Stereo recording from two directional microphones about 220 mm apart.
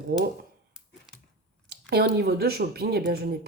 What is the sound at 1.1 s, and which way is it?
Computer keyboard, centre (ahead or behind).